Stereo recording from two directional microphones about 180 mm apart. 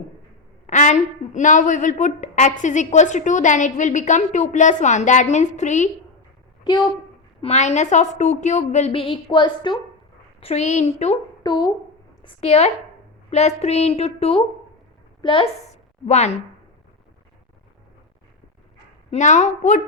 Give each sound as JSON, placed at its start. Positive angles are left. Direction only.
{"t": 0.7, "sound": "a woman's voice", "side_deg": 40}
{"t": 7.4, "sound": "a woman's voice", "side_deg": 40}
{"t": 10.4, "sound": "a woman's voice", "side_deg": 40}
{"t": 11.4, "sound": "a woman's voice", "side_deg": 25}
{"t": 19.1, "sound": "a woman's voice", "side_deg": 40}